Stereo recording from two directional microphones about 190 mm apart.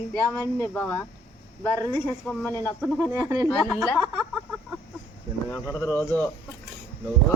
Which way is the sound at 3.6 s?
5° left (ahead or behind).